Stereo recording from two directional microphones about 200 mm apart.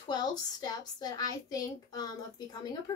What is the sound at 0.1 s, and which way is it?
A woman's voice, 20° left (ahead or behind).